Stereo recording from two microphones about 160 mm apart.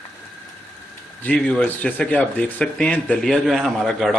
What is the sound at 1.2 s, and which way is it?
A man's voice, 10° left (ahead or behind).